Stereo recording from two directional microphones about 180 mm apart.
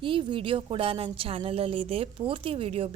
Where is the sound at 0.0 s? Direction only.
25° right (ahead or behind).